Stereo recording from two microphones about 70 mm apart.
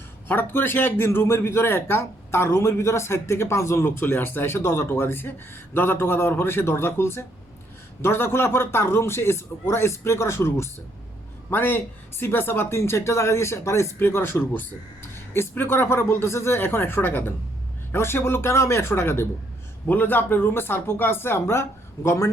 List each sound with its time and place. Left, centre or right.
0.3 s speech: left